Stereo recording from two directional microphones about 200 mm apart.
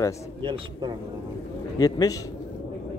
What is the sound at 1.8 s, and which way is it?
Speech, 15° left (ahead or behind).